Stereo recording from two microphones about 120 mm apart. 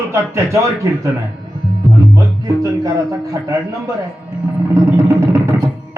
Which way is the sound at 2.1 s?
30° right (ahead or behind).